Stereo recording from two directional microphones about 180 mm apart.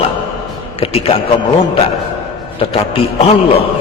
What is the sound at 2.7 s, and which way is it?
Speech, 30° left (ahead or behind).